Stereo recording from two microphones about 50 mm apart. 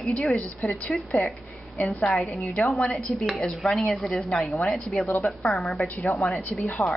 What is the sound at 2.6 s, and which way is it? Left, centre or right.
A woman's voice, centre.